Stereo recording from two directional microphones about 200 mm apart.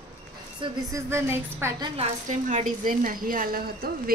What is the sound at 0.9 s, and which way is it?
Speech, 15° right (ahead or behind).